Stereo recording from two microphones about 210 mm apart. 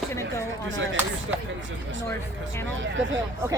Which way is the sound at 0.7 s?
65° right (ahead or behind).